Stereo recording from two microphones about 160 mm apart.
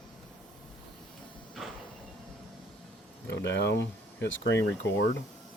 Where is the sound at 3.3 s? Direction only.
90° left.